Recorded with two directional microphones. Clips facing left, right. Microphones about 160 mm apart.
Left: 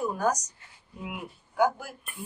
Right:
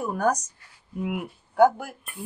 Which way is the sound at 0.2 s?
55° right (ahead or behind).